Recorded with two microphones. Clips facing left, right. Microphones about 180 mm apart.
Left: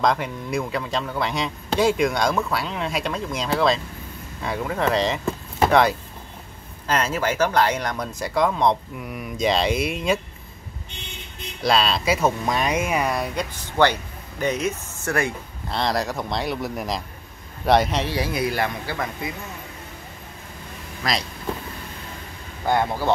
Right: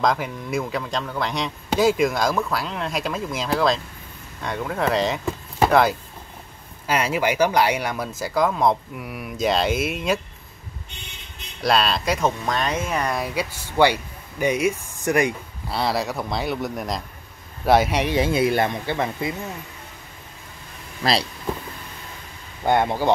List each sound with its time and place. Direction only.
0.0 s speech: centre (ahead or behind)
6.9 s speech: 10° right (ahead or behind)
11.6 s speech: centre (ahead or behind)
18.1 s speech: 25° right (ahead or behind)
21.0 s speech: 30° right (ahead or behind)
22.7 s speech: 20° right (ahead or behind)